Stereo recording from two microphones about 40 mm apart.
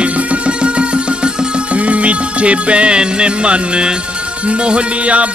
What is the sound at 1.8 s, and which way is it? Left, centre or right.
Music, right.